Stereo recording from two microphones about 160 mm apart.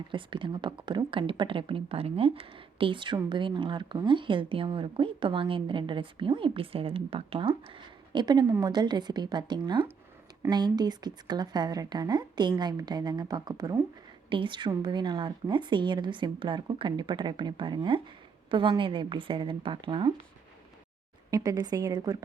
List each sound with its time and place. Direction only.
0.1 s a woman's voice: 30° right (ahead or behind)
21.2 s a woman's voice: 25° right (ahead or behind)